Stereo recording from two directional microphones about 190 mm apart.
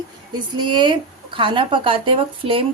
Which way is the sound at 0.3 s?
25° right (ahead or behind).